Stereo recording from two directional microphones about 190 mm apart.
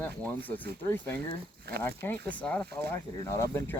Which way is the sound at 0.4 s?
10° left (ahead or behind).